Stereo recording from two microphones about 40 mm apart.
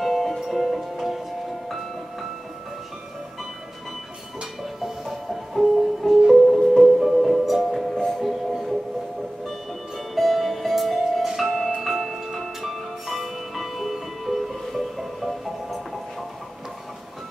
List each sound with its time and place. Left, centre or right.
0.0 s music: centre
4.4 s music: centre
7.9 s music: centre
8.2 s music: centre